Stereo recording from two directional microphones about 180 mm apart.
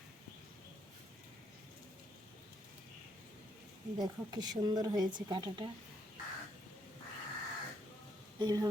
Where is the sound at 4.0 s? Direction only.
25° right (ahead or behind).